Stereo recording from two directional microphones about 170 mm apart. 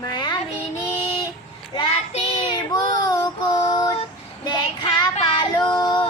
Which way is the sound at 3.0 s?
25° left (ahead or behind).